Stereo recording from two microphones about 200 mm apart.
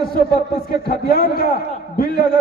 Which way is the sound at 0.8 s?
50° left (ahead or behind).